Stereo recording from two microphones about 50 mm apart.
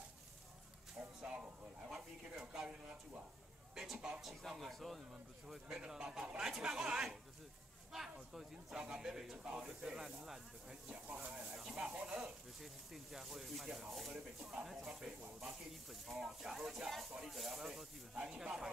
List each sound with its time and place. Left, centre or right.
1.2 s a sound: centre
1.9 s a sound: centre
4.2 s speech: centre
5.5 s speech: centre
10.9 s speech: right
11.5 s a sound: centre
11.8 s speech: right
12.5 s speech: centre
18.1 s speech: centre